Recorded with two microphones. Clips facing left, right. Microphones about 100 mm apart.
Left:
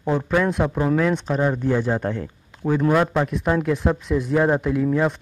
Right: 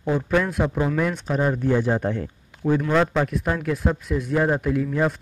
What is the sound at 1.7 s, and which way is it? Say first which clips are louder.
Speech: even; 15° right (ahead or behind).